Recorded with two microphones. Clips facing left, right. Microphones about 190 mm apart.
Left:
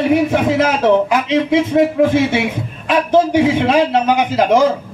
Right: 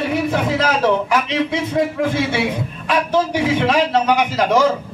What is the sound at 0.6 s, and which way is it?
A man's voice, 20° left (ahead or behind).